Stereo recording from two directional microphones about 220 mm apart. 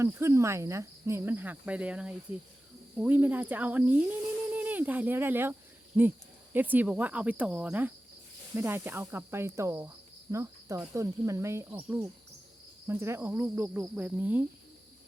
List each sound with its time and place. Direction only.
0.0 s cricket: 10° right (ahead or behind)
4.5 s speech: 10° right (ahead or behind)
6.0 s cricket: 10° right (ahead or behind)